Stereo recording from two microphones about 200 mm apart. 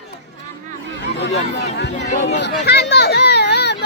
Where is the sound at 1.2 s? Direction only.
60° left (ahead or behind).